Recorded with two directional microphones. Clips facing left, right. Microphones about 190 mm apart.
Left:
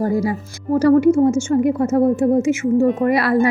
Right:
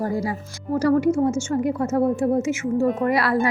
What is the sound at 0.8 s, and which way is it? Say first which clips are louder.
Speech: left 6 dB; 25° left (ahead or behind).